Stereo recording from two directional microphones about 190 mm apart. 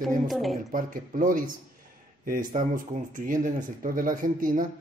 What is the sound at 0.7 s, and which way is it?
Speech, 45° right (ahead or behind).